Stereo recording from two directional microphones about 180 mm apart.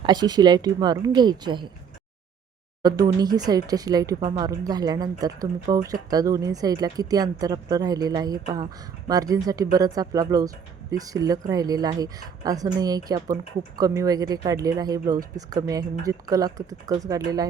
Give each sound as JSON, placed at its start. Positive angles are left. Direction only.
{"t": 0.0, "sound": "speech", "side_deg": -25}
{"t": 2.8, "sound": "speech", "side_deg": -20}